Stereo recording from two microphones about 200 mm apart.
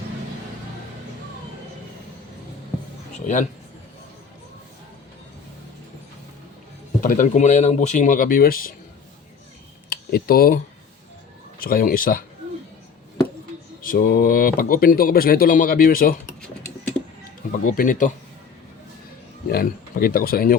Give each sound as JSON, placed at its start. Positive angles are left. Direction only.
{"t": 3.2, "sound": "speech", "side_deg": 40}
{"t": 7.0, "sound": "speech", "side_deg": 45}
{"t": 9.9, "sound": "computer keyboard", "side_deg": 50}
{"t": 11.6, "sound": "speech", "side_deg": 45}
{"t": 13.8, "sound": "speech", "side_deg": 45}
{"t": 17.5, "sound": "speech", "side_deg": 40}
{"t": 19.5, "sound": "speech", "side_deg": 50}